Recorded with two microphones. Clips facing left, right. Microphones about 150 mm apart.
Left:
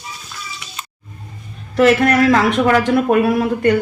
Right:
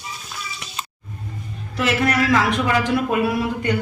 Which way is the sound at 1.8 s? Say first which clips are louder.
Left 8 dB; 55° left (ahead or behind).